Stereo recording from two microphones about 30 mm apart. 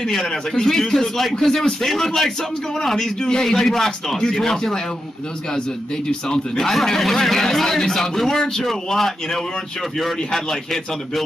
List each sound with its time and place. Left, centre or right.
0.1 s a man's voice: centre
3.0 s a man's voice: left
3.4 s a man's voice: centre
6.2 s a man's voice: left
6.6 s a man's voice: centre